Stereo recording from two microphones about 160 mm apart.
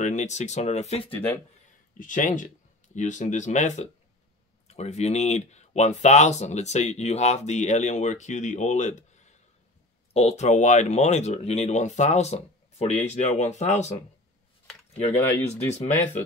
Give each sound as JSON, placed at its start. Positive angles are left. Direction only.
{"t": 0.0, "sound": "speech", "side_deg": 50}
{"t": 1.1, "sound": "speech", "side_deg": 15}
{"t": 2.0, "sound": "speech", "side_deg": 55}
{"t": 15.1, "sound": "speech", "side_deg": 15}